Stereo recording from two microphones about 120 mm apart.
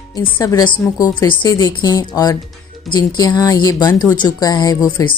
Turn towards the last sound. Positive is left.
turn(degrees=35)  # may be behind; listen again after turning